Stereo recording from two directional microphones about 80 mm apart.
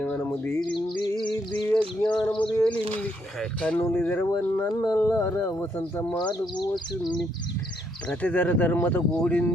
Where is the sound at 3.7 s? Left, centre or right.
Left.